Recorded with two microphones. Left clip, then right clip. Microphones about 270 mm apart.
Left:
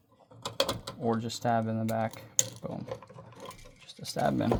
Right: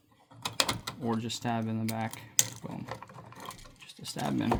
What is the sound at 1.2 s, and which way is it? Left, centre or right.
Speech, centre.